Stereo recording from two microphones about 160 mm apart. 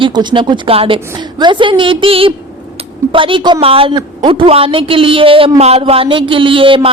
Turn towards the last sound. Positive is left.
turn(degrees=-35)  # may be behind; listen again after turning